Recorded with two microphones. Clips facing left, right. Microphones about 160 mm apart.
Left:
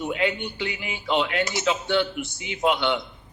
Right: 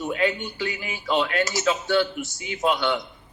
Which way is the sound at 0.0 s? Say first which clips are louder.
Right 1 dB; 20° left (ahead or behind).